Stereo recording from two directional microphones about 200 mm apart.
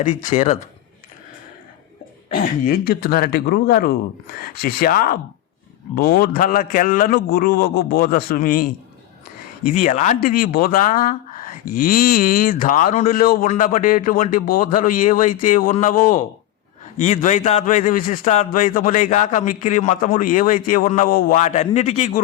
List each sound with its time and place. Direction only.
0.0 s speech: 40° left (ahead or behind)
2.3 s speech: 45° left (ahead or behind)